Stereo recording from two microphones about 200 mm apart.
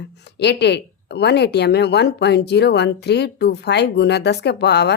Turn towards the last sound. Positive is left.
turn(degrees=55)  # may be behind; listen again after turning